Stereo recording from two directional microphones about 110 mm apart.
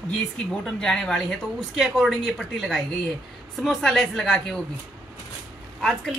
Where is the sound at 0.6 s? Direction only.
5° left (ahead or behind).